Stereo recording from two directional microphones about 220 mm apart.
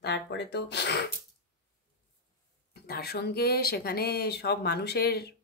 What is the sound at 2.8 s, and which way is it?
Speech, 45° left (ahead or behind).